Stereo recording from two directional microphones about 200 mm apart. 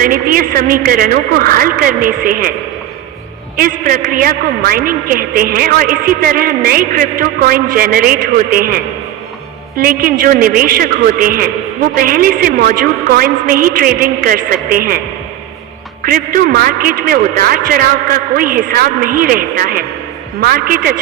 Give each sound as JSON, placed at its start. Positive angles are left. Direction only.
{"t": 0.0, "sound": "a woman's voice", "side_deg": -45}
{"t": 3.6, "sound": "a woman's voice", "side_deg": -45}
{"t": 16.0, "sound": "a woman's voice", "side_deg": -45}